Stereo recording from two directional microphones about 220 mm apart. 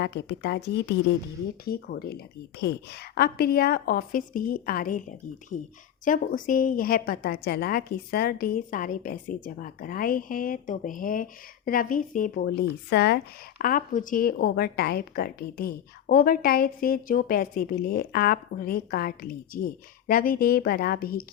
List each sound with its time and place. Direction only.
0.0 s a woman's voice: 50° left (ahead or behind)
6.1 s a woman's voice: 35° left (ahead or behind)